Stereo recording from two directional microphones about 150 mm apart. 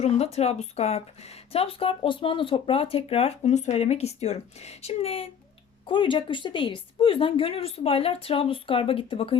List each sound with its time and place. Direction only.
0.0 s speech: 45° left (ahead or behind)